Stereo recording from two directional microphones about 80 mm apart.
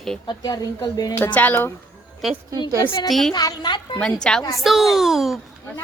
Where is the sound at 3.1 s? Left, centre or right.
Centre.